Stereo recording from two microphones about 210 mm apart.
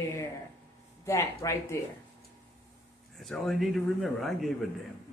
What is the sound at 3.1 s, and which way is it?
Speech, centre (ahead or behind).